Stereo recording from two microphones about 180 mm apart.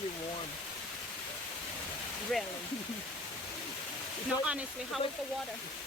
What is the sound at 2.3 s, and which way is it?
Speech, 5° left (ahead or behind).